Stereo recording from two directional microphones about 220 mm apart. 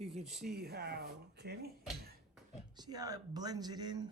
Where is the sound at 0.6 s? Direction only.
45° right (ahead or behind).